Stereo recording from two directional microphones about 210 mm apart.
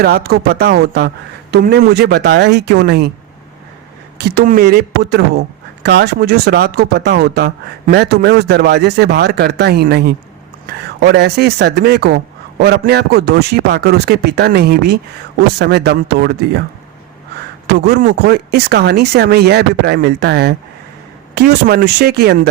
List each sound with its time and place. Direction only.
0.0 s speech: 45° right (ahead or behind)
4.2 s speech: 50° right (ahead or behind)
17.7 s speech: 50° right (ahead or behind)